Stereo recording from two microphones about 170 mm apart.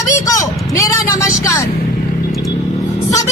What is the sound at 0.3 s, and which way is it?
Vehicle, 20° left (ahead or behind).